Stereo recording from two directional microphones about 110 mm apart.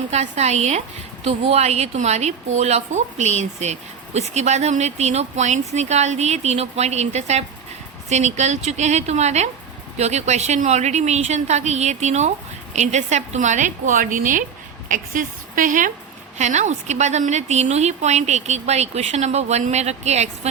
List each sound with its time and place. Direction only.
0.1 s a woman's voice: 90° right
1.2 s a woman's voice: 80° right
16.4 s a woman's voice: 90° right